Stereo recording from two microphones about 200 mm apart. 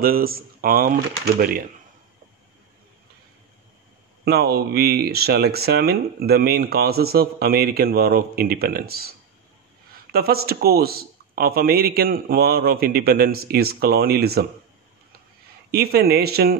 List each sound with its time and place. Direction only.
0.0 s speech: 45° right (ahead or behind)
4.2 s speech: 50° right (ahead or behind)
10.1 s speech: 50° right (ahead or behind)
15.7 s speech: 50° right (ahead or behind)